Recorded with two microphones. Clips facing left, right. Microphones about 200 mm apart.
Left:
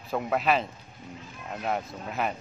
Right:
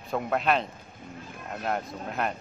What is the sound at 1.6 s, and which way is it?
Speech, centre (ahead or behind).